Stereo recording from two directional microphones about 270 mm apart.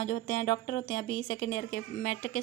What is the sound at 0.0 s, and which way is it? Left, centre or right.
A woman's voice, left.